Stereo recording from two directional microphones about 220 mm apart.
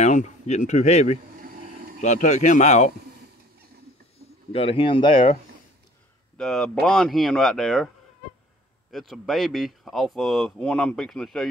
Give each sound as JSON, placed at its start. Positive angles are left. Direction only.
{"t": 0.0, "sound": "speech", "side_deg": 30}
{"t": 1.4, "sound": "a sound", "side_deg": -40}
{"t": 2.0, "sound": "speech", "side_deg": 30}
{"t": 4.5, "sound": "speech", "side_deg": 25}
{"t": 6.3, "sound": "speech", "side_deg": 5}
{"t": 8.9, "sound": "speech", "side_deg": 0}